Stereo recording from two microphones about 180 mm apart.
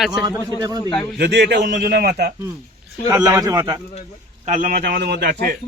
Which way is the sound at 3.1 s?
20° right (ahead or behind).